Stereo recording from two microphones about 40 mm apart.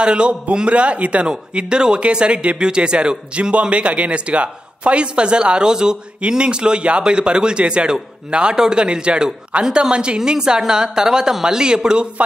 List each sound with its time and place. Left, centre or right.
0.0 s a man's voice: right